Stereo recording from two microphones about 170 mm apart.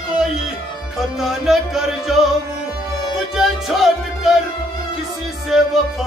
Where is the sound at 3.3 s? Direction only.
Centre (ahead or behind).